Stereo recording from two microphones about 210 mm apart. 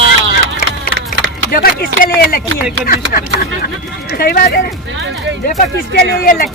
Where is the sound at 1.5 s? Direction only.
45° left (ahead or behind).